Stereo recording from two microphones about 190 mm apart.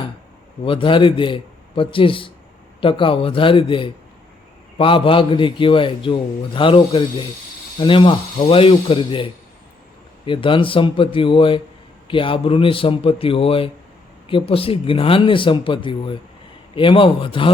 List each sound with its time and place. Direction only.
0.6 s a man's voice: 25° left (ahead or behind)